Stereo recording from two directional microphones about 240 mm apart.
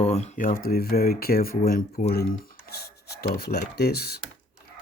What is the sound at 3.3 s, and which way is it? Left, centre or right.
Speech, left.